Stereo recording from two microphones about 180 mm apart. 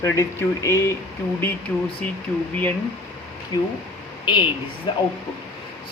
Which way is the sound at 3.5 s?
20° left (ahead or behind).